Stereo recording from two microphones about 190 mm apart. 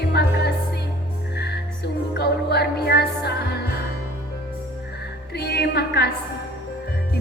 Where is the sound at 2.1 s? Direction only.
60° left (ahead or behind).